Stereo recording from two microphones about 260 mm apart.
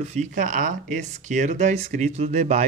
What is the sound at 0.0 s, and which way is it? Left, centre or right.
Speech, right.